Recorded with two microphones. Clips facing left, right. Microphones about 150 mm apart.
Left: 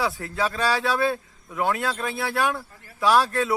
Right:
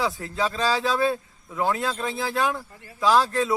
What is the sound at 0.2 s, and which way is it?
Speech, 25° right (ahead or behind).